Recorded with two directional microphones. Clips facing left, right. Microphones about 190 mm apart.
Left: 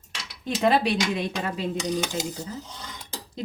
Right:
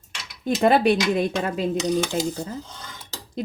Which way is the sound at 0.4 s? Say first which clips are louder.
Right 4 dB; 50° right (ahead or behind).